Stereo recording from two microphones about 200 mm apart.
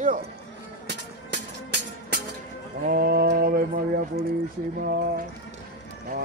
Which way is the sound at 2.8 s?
45° right (ahead or behind).